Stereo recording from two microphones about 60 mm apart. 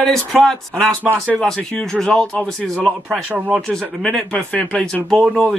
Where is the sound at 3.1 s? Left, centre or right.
Right.